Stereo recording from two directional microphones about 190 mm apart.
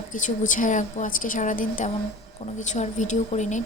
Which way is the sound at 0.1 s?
40° left (ahead or behind).